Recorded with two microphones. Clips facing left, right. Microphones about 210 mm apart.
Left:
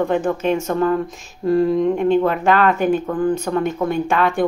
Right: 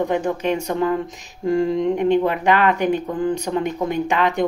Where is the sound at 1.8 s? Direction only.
15° right (ahead or behind).